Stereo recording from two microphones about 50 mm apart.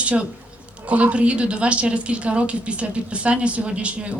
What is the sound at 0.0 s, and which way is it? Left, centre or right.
A woman's voice, right.